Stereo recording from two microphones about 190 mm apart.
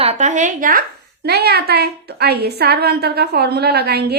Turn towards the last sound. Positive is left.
turn(degrees=-55)  # may be behind; listen again after turning